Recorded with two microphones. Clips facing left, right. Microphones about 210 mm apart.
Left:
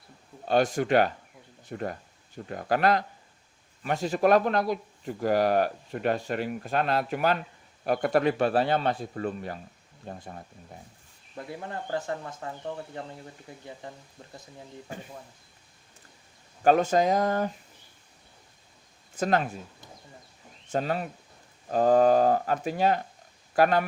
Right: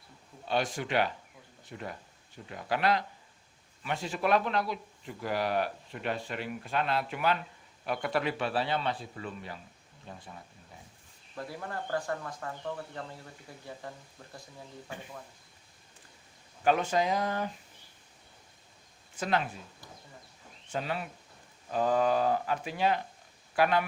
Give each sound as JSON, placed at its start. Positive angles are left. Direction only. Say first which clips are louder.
{"t": 0.4, "sound": "speech", "louder": "left 7 dB", "side_deg": 45}
{"t": 11.3, "sound": "speech", "louder": "left 2 dB", "side_deg": 20}
{"t": 16.6, "sound": "speech", "louder": "left 6 dB", "side_deg": 45}
{"t": 19.1, "sound": "speech", "louder": "left 5 dB", "side_deg": 45}
{"t": 20.7, "sound": "speech", "louder": "left 6 dB", "side_deg": 45}